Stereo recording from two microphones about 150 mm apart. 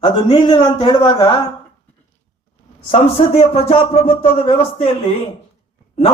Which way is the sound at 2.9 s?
40° left (ahead or behind).